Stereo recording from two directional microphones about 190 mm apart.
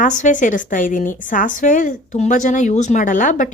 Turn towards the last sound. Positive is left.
turn(degrees=45)  # may be behind; listen again after turning